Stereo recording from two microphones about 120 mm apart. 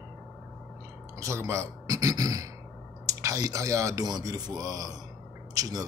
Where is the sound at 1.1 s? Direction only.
25° right (ahead or behind).